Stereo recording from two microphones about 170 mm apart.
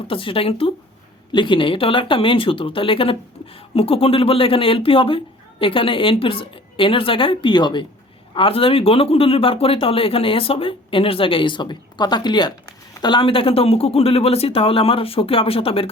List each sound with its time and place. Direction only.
0.1 s speech: 30° left (ahead or behind)